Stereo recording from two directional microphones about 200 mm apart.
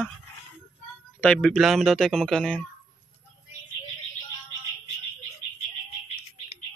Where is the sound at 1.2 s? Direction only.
5° left (ahead or behind).